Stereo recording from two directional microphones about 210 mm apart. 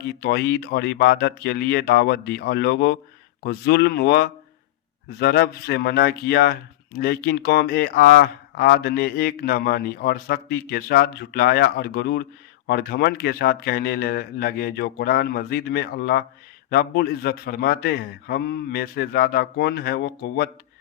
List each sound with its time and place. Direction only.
0.2 s speech: 50° left (ahead or behind)